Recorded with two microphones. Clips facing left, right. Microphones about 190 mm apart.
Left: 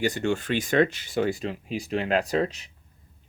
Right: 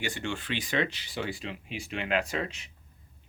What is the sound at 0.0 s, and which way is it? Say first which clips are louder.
Speech: left 9 dB; 40° left (ahead or behind).